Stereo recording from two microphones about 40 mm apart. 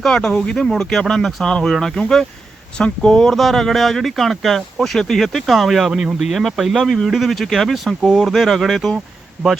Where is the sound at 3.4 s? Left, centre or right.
Centre.